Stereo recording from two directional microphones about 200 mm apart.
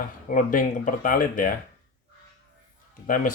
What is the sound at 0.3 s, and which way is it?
Speech, 40° left (ahead or behind).